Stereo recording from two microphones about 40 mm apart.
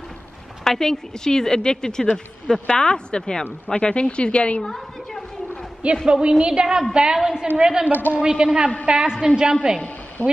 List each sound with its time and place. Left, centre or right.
0.7 s a woman's voice: centre
2.6 s a woman's voice: left
4.6 s a sound: centre
6.0 s a woman's voice: right
10.2 s a woman's voice: left